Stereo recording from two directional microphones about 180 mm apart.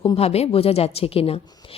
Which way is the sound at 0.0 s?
35° left (ahead or behind).